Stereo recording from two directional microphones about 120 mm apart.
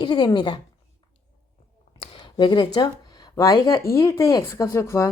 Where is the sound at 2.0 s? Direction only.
45° left (ahead or behind); by 3.5 s 30° left (ahead or behind).